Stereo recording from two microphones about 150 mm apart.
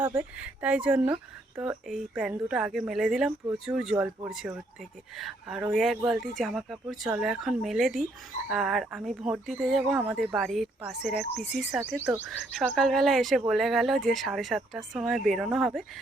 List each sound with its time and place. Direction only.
0.0 s speech: 10° right (ahead or behind)